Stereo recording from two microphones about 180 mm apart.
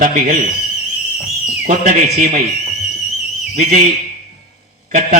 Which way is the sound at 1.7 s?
50° right (ahead or behind).